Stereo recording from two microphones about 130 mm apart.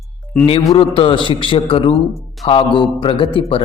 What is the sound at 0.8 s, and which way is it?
A man's voice, 45° left (ahead or behind).